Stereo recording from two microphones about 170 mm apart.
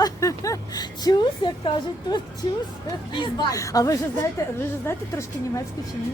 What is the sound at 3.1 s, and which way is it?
A woman's voice, 25° left (ahead or behind).